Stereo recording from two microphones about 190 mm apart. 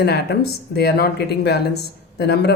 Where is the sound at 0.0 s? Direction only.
60° left (ahead or behind).